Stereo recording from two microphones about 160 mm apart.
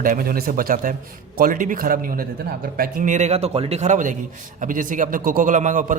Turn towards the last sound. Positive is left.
turn(degrees=-55)  # may be behind; listen again after turning